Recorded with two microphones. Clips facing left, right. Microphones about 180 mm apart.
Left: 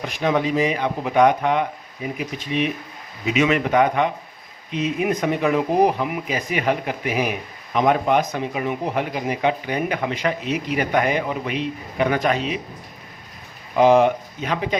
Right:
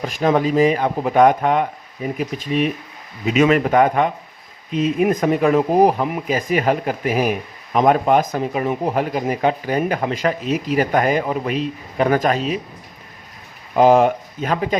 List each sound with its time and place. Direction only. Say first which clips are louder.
0.0 s speech: right 4 dB; 40° right (ahead or behind)
13.7 s speech: right 2 dB; 45° right (ahead or behind)